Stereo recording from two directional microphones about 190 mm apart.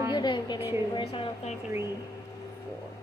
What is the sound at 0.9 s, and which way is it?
Speech, 30° left (ahead or behind).